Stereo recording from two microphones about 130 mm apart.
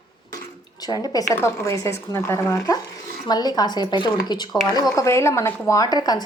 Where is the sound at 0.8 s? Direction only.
30° left (ahead or behind).